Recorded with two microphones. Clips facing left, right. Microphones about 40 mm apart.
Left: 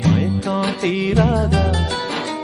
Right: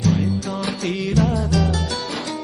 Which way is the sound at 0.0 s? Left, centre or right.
Left.